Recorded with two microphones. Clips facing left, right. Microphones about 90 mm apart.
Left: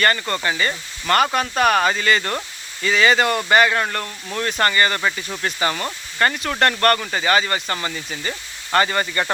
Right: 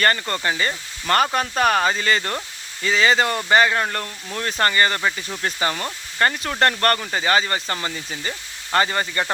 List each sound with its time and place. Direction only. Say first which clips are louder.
0.0 s speech: left 1 dB; 35° right (ahead or behind)